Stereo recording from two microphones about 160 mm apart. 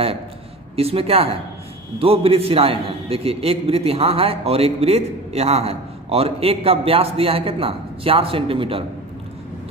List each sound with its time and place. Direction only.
0.7 s a man's voice: 40° right (ahead or behind)